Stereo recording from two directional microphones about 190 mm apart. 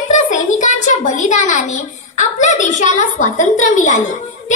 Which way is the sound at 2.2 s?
40° left (ahead or behind).